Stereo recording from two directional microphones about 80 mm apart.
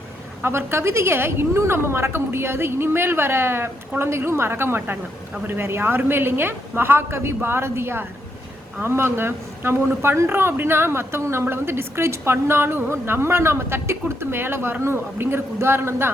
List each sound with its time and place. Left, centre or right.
0.4 s a woman's voice: right